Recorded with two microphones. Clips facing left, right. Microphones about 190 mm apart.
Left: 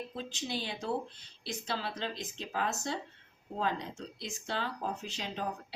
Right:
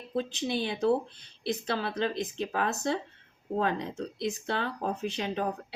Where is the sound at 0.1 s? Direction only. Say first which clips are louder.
Right 8 dB; 60° right (ahead or behind).